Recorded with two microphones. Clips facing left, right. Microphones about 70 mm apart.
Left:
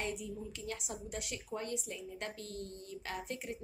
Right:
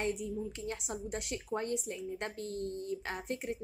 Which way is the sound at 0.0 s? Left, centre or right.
Right.